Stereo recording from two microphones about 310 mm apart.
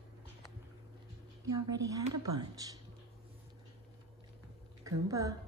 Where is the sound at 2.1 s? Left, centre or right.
Right.